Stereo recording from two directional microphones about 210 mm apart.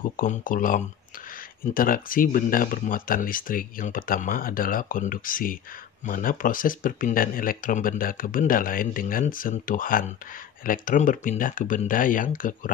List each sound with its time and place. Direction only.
0.2 s speech: 40° left (ahead or behind)